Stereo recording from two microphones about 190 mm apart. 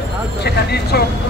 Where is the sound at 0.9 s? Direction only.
55° left (ahead or behind).